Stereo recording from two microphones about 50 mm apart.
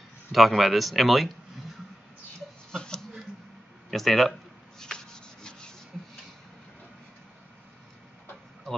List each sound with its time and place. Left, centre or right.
0.3 s speech: centre
2.7 s a sound: centre
3.9 s sanding: centre